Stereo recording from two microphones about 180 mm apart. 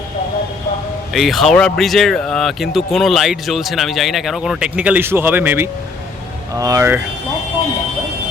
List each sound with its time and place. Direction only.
1.1 s speech: centre (ahead or behind)